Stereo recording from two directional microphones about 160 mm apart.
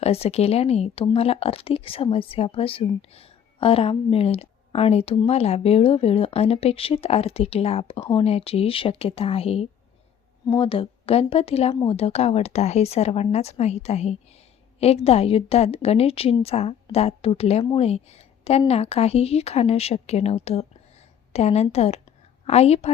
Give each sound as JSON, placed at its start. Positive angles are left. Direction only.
{"t": 0.0, "sound": "a woman's voice", "side_deg": 40}